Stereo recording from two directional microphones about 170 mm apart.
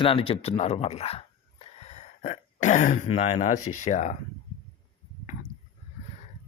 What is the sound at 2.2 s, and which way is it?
Speech, 45° left (ahead or behind).